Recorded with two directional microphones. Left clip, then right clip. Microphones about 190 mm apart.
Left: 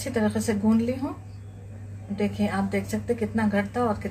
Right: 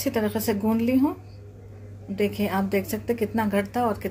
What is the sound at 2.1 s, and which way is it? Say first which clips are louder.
A woman's voice: right 2 dB; 50° right (ahead or behind).